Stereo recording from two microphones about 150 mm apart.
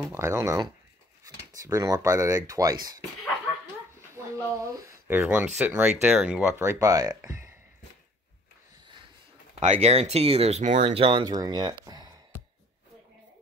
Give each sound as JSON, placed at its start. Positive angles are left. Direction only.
{"t": 0.0, "sound": "speech", "side_deg": -15}
{"t": 4.6, "sound": "speech", "side_deg": -20}
{"t": 6.6, "sound": "speech", "side_deg": -20}
{"t": 9.6, "sound": "speech", "side_deg": -45}
{"t": 10.8, "sound": "speech", "side_deg": -40}
{"t": 11.8, "sound": "a sound", "side_deg": -25}